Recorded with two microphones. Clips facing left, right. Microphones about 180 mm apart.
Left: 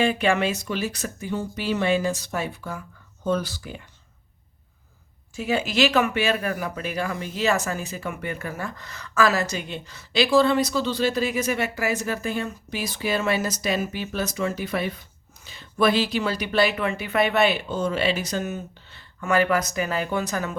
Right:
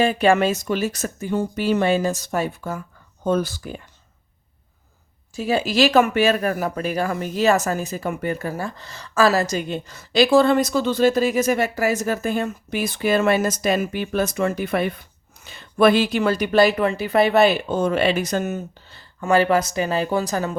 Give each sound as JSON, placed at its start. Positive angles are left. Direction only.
{"t": 0.0, "sound": "speech", "side_deg": -40}
{"t": 5.3, "sound": "speech", "side_deg": -35}